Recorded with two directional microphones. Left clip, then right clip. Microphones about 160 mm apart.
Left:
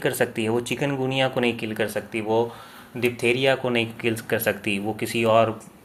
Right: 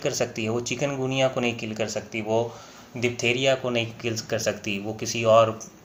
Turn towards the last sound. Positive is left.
turn(degrees=35)  # may be behind; listen again after turning